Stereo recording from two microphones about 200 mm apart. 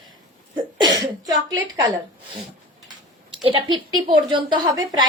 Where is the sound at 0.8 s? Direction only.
20° right (ahead or behind).